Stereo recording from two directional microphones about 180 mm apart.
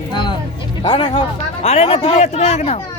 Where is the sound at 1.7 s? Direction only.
35° left (ahead or behind).